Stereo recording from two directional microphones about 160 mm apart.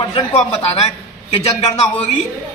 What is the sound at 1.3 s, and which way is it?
Speech, 40° left (ahead or behind).